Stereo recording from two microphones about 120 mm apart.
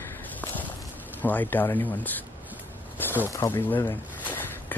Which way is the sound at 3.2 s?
20° left (ahead or behind).